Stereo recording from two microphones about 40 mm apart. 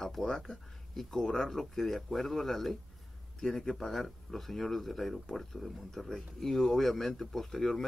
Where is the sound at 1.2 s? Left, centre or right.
Centre.